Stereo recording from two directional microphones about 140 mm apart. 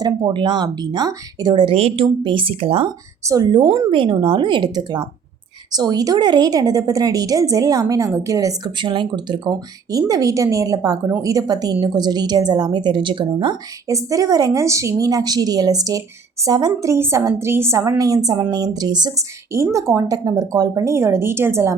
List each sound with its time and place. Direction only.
0.0 s speech: 30° right (ahead or behind)
3.2 s a woman's voice: 30° right (ahead or behind)
13.8 s a woman's voice: 25° right (ahead or behind)